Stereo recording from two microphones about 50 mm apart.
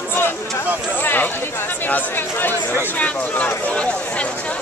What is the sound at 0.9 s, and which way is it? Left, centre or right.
Speech, left.